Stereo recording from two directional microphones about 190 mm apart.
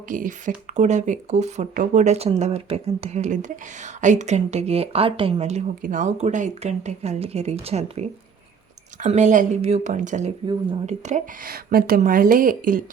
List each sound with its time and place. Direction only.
0.1 s speech: 45° right (ahead or behind)